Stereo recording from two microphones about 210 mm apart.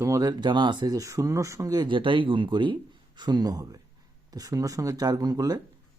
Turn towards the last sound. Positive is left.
turn(degrees=-15)  # may be behind; listen again after turning